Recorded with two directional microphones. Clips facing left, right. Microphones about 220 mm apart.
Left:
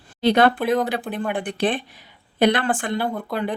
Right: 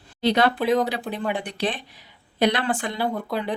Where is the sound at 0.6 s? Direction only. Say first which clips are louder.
Even; 5° left (ahead or behind).